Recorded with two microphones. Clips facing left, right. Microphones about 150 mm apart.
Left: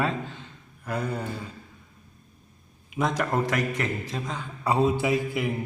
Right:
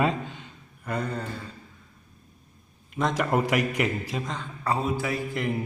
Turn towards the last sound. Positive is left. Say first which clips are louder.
# left 4 dB
turn(degrees=15)  # may be behind; listen again after turning